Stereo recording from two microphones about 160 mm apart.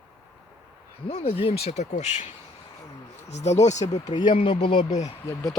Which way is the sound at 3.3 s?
45° left (ahead or behind).